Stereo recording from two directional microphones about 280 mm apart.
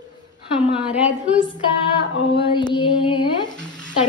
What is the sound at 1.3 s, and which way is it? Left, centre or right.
Female singing, centre.